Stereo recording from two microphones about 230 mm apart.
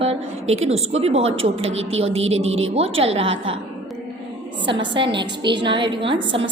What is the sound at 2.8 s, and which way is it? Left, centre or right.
Speech, right.